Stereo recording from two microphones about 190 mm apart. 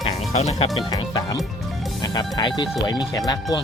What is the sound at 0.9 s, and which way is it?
Music, 20° left (ahead or behind).